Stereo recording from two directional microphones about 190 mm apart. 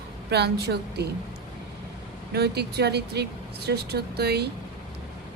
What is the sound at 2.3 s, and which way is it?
Speech, 60° right (ahead or behind).